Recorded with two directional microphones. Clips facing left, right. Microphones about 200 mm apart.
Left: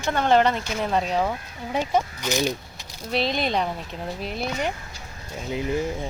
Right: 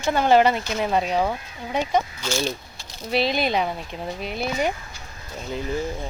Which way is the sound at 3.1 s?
5° right (ahead or behind).